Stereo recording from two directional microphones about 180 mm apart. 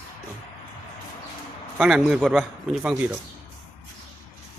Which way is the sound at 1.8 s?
5° right (ahead or behind).